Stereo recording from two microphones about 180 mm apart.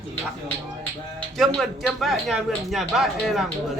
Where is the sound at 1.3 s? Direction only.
Centre (ahead or behind).